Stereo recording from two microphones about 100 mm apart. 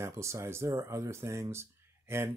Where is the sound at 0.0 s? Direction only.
30° right (ahead or behind).